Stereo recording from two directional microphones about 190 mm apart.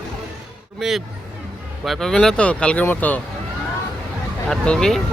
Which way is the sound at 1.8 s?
Centre (ahead or behind).